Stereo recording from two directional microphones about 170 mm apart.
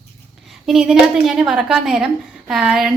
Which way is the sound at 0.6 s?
Centre (ahead or behind).